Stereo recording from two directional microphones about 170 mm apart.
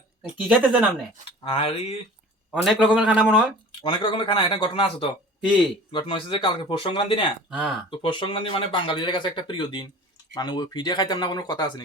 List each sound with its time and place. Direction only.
0.2 s a man's voice: 5° right (ahead or behind)
1.5 s speech: 35° left (ahead or behind)
2.5 s a man's voice: 5° right (ahead or behind)
3.7 s speech: 30° left (ahead or behind)
5.4 s speech: 5° right (ahead or behind)
5.9 s speech: 30° left (ahead or behind)